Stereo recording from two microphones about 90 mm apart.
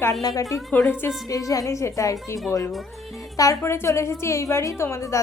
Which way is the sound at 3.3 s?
40° left (ahead or behind).